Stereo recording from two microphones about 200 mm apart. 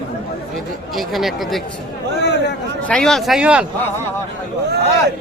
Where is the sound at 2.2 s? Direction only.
60° left (ahead or behind).